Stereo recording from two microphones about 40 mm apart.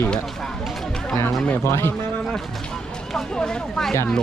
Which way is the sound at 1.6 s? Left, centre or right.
Left.